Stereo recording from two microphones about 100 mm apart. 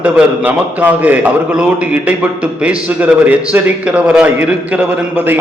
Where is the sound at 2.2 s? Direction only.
15° right (ahead or behind).